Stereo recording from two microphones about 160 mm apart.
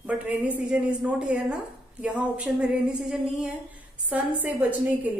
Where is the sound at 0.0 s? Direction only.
10° right (ahead or behind).